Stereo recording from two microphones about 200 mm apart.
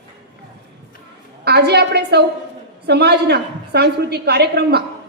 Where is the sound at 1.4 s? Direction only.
55° right (ahead or behind).